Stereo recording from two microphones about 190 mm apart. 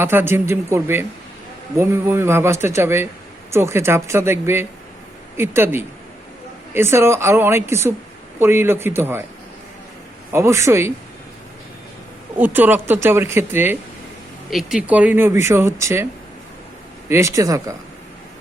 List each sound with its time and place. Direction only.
0.0 s speech: 10° right (ahead or behind)
10.3 s speech: 15° right (ahead or behind)
12.4 s speech: 10° right (ahead or behind)
17.1 s speech: 15° right (ahead or behind)